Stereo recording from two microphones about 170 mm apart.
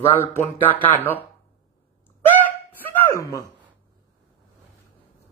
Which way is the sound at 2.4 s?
10° left (ahead or behind).